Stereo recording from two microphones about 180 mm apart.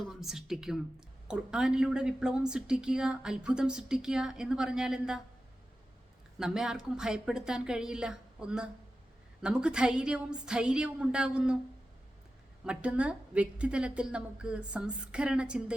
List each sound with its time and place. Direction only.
0.0 s speech: centre (ahead or behind)
6.4 s speech: 5° right (ahead or behind)
12.6 s speech: 5° right (ahead or behind)